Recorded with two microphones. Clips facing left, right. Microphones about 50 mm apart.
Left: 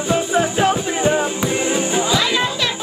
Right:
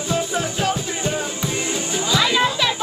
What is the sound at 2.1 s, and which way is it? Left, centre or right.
Music, centre.